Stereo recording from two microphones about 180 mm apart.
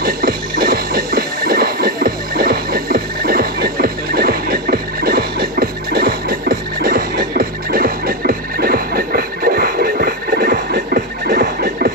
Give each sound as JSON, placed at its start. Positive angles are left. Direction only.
{"t": 0.0, "sound": "music", "side_deg": -55}